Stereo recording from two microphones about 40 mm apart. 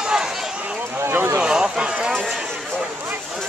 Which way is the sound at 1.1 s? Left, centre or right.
Right.